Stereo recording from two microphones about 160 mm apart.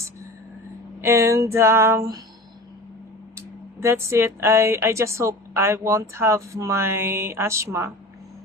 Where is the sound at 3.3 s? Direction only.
15° right (ahead or behind).